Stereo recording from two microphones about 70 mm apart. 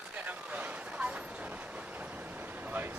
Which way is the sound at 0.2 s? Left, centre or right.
Right.